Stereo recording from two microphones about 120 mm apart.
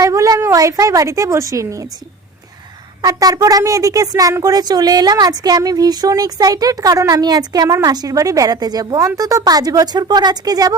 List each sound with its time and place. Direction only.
0.0 s a woman's voice: 30° right (ahead or behind)
3.0 s a woman's voice: 30° right (ahead or behind)